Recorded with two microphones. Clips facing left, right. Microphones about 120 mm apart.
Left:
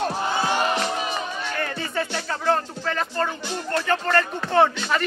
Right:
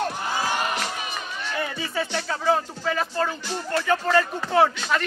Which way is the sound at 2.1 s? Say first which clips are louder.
Right 1 dB; centre (ahead or behind).